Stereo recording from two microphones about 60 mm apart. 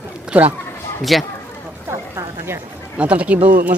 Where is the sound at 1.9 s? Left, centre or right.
Right.